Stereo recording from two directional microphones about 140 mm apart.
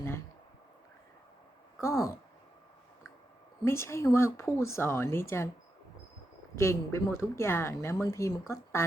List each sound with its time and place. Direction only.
1.8 s a woman's voice: 20° left (ahead or behind)
3.6 s a woman's voice: 20° left (ahead or behind)
6.6 s a woman's voice: 20° left (ahead or behind)